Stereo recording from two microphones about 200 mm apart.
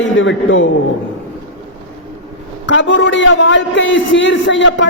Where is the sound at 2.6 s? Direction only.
65° left (ahead or behind).